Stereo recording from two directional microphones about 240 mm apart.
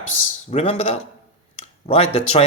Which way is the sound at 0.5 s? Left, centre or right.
Left.